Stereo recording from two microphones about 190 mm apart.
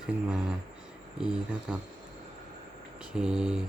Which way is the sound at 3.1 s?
5° right (ahead or behind).